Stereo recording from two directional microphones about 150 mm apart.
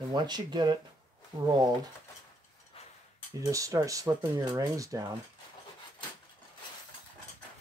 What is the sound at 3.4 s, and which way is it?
Speech, 20° right (ahead or behind).